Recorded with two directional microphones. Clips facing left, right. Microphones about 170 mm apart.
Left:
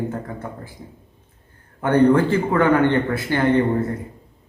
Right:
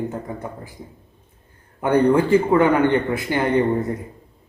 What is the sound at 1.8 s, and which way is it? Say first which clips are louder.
A man's voice: left 1 dB; 15° right (ahead or behind).